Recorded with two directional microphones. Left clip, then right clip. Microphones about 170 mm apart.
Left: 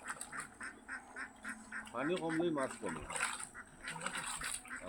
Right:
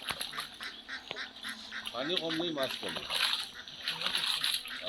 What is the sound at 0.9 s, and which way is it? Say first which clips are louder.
Duck: right 6 dB; 80° left.